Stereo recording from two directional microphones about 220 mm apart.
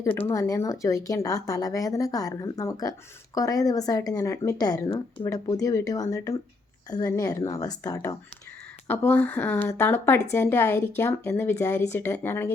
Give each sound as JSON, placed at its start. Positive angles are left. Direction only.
{"t": 0.0, "sound": "a woman's voice", "side_deg": 10}